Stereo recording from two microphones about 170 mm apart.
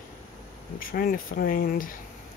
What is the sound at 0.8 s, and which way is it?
Speech, 60° left (ahead or behind).